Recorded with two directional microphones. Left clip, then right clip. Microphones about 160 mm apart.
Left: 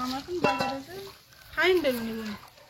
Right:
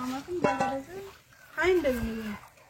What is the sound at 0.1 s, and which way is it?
Stir, centre (ahead or behind).